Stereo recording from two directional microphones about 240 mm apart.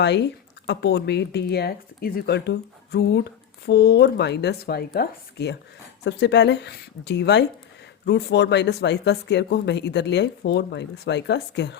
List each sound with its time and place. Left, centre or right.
0.0 s speech: left